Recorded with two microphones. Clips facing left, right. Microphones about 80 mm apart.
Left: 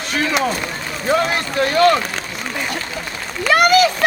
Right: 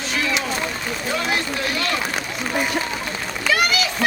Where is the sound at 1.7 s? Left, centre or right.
Left.